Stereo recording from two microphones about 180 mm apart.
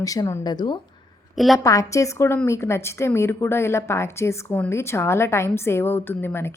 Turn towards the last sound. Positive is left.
turn(degrees=10)  # may be behind; listen again after turning